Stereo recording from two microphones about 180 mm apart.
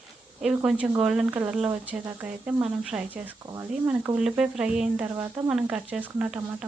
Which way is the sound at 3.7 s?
5° right (ahead or behind).